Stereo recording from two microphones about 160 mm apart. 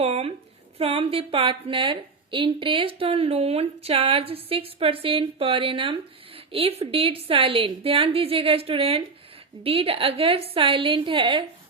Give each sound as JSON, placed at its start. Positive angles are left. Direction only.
{"t": 0.0, "sound": "a woman's voice", "side_deg": -40}